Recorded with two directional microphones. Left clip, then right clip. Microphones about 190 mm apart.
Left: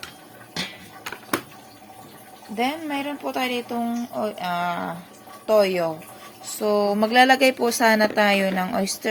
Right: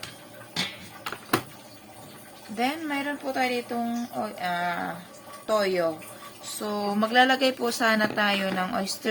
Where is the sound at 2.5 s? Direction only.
20° left (ahead or behind).